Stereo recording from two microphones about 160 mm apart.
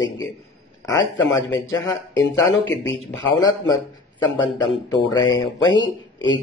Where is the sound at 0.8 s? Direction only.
25° left (ahead or behind).